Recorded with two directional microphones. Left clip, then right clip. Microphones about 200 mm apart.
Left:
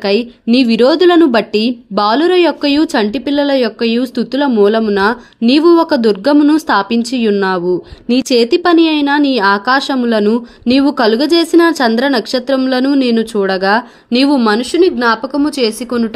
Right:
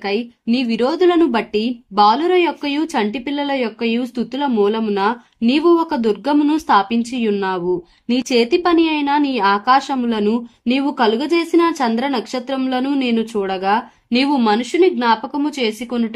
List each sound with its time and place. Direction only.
0.0 s speech: 25° left (ahead or behind)